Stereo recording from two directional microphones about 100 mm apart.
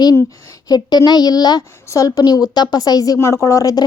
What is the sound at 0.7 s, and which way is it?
A woman's voice, 45° left (ahead or behind).